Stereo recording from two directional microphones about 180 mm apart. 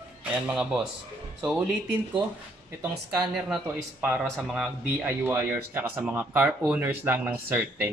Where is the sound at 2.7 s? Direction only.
5° right (ahead or behind).